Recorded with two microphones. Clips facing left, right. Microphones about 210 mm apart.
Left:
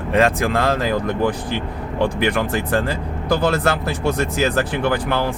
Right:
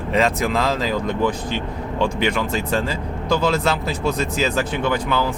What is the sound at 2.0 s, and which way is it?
Speech, 60° left (ahead or behind).